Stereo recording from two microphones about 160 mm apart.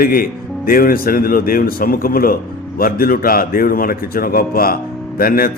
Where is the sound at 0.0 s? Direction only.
65° left (ahead or behind).